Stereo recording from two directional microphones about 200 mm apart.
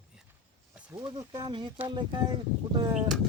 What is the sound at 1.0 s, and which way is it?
A man's voice, 20° right (ahead or behind).